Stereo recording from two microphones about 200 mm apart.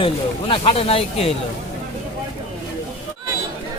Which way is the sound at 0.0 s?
25° left (ahead or behind).